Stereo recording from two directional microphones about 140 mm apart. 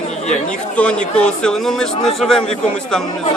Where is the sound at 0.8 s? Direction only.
5° left (ahead or behind).